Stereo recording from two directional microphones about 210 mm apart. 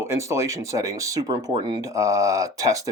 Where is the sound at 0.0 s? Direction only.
15° right (ahead or behind).